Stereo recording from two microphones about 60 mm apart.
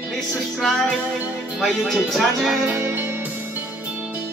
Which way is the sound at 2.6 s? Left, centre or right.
Right.